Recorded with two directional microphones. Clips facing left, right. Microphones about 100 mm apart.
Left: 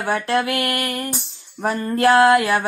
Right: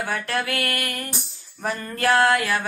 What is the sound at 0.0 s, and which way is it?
Mantra, 30° left (ahead or behind).